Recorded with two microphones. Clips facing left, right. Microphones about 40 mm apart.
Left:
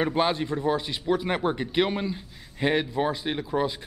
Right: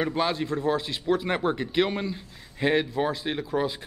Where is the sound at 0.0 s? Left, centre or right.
Left.